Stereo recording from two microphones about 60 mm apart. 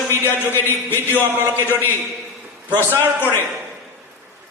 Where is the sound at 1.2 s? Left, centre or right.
Right.